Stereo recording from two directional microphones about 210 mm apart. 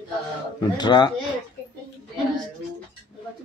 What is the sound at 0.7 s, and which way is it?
Speech, 20° left (ahead or behind).